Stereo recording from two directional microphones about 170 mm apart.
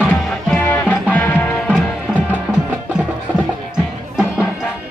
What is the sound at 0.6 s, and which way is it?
Music, 10° left (ahead or behind).